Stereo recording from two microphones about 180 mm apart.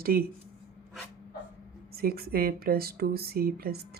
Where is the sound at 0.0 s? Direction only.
55° right (ahead or behind).